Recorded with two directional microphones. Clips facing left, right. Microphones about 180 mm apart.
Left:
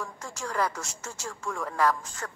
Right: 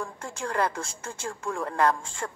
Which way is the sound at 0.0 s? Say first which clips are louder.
Right 3 dB; 30° right (ahead or behind).